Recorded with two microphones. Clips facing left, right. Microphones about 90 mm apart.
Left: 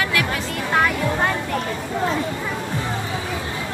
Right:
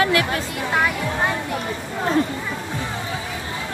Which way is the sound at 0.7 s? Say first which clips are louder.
Left 2 dB; centre (ahead or behind).